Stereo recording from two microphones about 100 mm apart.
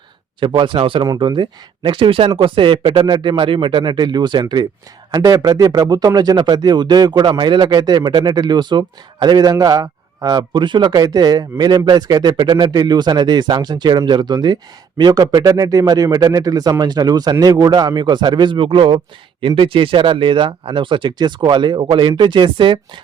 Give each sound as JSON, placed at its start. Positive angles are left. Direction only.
{"t": 0.3, "sound": "speech", "side_deg": -55}
{"t": 1.0, "sound": "speech", "side_deg": -45}
{"t": 5.1, "sound": "speech", "side_deg": -35}